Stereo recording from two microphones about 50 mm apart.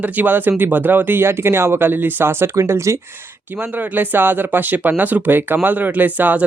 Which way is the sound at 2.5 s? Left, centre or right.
Right.